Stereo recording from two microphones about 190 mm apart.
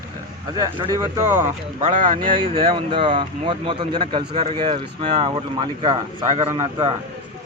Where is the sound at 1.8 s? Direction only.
40° right (ahead or behind).